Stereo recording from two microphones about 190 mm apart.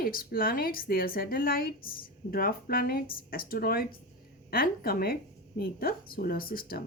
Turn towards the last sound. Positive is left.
turn(degrees=50)  # may be behind; listen again after turning